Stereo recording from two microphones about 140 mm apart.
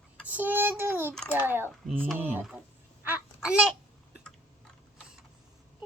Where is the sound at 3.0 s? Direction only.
15° right (ahead or behind).